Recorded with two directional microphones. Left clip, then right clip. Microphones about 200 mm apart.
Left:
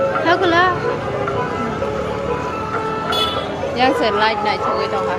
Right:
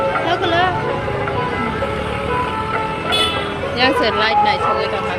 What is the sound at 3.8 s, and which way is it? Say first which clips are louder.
Speech: even; 5° left (ahead or behind).